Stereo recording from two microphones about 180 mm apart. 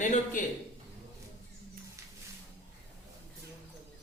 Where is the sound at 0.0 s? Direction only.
45° left (ahead or behind).